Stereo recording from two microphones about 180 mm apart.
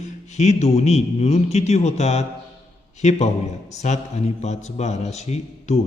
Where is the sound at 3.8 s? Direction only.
40° left (ahead or behind).